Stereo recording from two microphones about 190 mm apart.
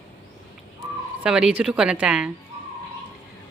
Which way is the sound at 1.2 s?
5° right (ahead or behind).